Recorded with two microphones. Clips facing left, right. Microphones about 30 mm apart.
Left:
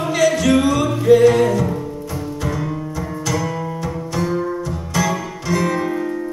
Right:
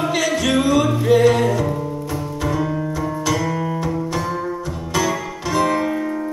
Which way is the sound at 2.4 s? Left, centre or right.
Centre.